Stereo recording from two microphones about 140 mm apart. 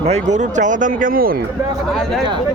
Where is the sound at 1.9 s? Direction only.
Centre (ahead or behind).